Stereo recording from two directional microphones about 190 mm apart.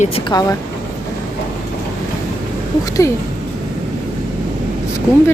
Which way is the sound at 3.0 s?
15° left (ahead or behind).